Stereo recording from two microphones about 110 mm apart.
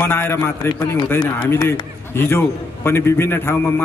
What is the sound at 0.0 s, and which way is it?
A man's voice, 20° left (ahead or behind).